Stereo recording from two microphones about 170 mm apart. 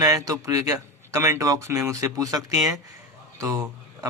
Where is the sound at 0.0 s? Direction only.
20° right (ahead or behind).